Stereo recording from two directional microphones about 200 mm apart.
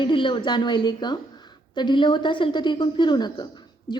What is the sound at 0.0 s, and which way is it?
A woman's voice, 25° left (ahead or behind).